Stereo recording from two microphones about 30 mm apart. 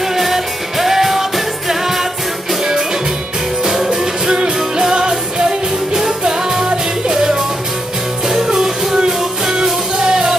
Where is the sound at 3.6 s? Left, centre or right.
Centre.